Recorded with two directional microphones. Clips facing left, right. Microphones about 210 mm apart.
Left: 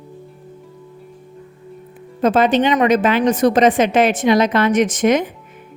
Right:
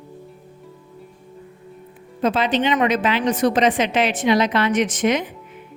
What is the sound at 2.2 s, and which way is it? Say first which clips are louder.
A woman's voice: left 5 dB; 45° left (ahead or behind).